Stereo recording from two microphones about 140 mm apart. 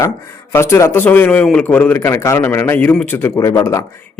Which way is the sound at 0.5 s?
20° left (ahead or behind).